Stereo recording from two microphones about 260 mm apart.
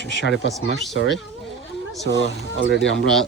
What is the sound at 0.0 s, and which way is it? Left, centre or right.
Speech, left.